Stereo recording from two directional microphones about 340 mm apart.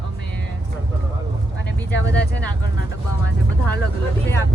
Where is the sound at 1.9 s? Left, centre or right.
Left.